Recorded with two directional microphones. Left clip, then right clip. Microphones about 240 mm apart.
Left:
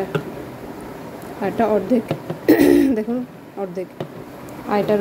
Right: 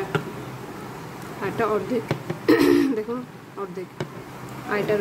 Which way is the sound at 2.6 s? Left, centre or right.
Right.